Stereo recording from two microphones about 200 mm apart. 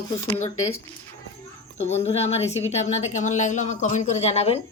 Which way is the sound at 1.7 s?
35° left (ahead or behind).